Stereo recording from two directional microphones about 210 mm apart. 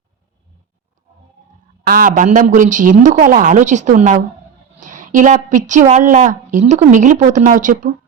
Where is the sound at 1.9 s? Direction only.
40° right (ahead or behind).